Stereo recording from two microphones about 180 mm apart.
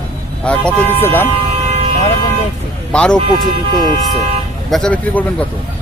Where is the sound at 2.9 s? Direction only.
5° left (ahead or behind).